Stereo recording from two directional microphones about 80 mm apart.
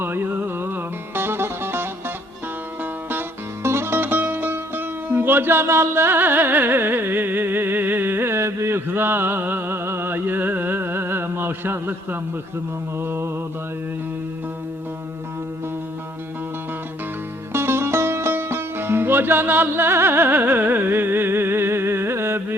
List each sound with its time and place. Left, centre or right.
0.0 s music: right
13.0 s mantra: right
17.5 s music: right